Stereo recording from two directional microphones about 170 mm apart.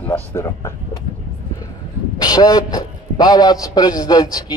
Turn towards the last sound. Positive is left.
turn(degrees=25)  # may be behind; listen again after turning